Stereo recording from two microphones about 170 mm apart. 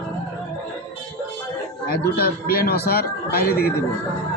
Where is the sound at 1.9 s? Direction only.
65° left (ahead or behind).